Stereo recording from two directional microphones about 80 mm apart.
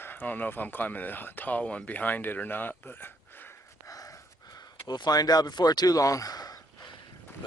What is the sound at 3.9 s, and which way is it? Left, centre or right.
Gasp, left.